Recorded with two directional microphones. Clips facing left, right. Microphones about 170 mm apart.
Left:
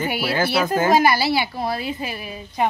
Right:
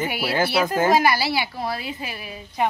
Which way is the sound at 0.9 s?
25° left (ahead or behind).